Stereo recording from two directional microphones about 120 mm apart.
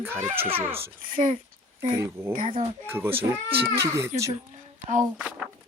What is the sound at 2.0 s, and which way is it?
Speech, 20° right (ahead or behind).